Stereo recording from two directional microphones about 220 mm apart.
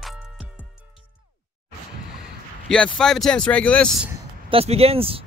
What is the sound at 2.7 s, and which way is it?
Speech, 5° left (ahead or behind).